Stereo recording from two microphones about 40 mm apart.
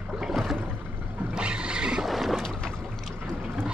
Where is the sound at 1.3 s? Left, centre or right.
Right.